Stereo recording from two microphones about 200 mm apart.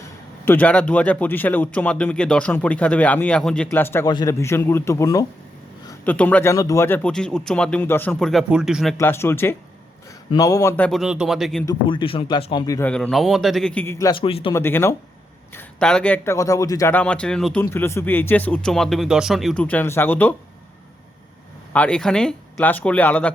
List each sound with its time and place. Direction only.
0.4 s a man's voice: 10° left (ahead or behind)
9.0 s a man's voice: 10° left (ahead or behind)
11.6 s speech: 20° left (ahead or behind)
12.9 s speech: centre (ahead or behind)
14.1 s speech: 25° left (ahead or behind)
14.5 s a man's voice: 10° left (ahead or behind)
21.7 s a man's voice: 5° left (ahead or behind)